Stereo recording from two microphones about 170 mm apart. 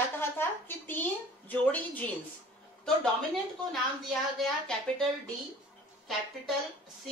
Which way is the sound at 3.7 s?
Centre (ahead or behind).